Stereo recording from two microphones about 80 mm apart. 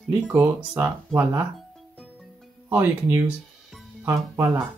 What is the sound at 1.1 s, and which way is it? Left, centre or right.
Speech, right.